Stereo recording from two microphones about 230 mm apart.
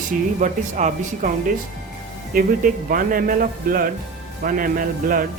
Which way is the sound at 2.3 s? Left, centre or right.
Right.